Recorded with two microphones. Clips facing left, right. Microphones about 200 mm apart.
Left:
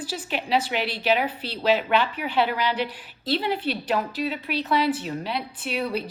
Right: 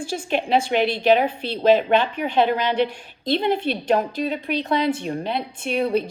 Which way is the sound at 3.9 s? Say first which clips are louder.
Right 5 dB; 40° right (ahead or behind).